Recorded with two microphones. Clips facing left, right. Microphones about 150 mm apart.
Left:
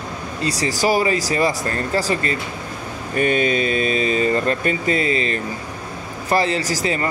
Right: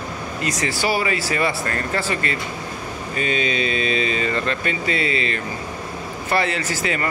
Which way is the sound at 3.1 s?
50° left (ahead or behind).